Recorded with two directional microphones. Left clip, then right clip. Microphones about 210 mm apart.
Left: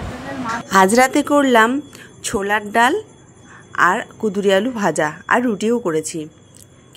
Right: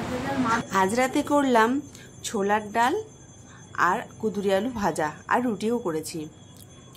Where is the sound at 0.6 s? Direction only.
40° left (ahead or behind).